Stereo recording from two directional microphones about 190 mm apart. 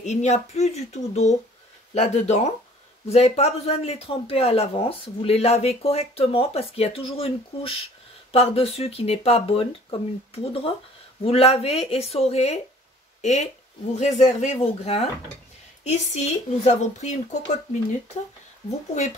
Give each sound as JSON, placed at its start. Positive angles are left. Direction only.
{"t": 0.0, "sound": "speech", "side_deg": 35}
{"t": 18.7, "sound": "speech", "side_deg": 35}